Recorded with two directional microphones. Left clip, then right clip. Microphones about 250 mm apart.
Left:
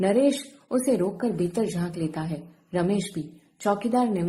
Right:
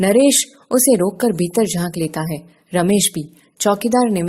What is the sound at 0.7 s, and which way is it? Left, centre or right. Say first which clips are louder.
Speech: right 9 dB; right.